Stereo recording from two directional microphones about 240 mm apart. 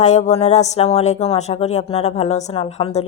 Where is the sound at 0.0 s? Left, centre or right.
Left.